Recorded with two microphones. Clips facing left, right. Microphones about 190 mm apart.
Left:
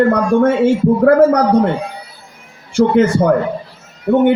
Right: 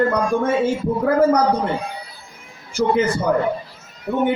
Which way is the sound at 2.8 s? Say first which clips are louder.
Left 7 dB; 80° left.